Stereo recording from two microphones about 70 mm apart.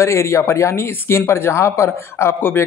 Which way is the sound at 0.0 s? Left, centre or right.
Left.